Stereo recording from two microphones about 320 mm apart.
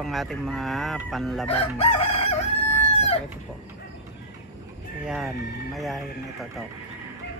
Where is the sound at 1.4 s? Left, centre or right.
Centre.